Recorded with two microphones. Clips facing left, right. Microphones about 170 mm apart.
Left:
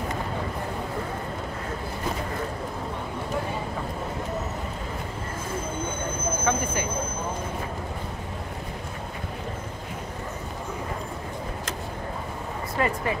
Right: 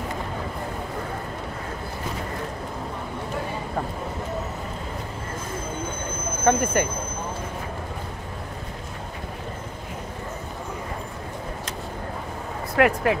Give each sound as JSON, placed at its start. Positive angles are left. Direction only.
{"t": 6.4, "sound": "speech", "side_deg": -55}
{"t": 12.7, "sound": "speech", "side_deg": -75}